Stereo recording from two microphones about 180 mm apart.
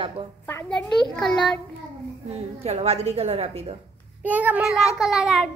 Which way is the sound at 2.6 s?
35° right (ahead or behind).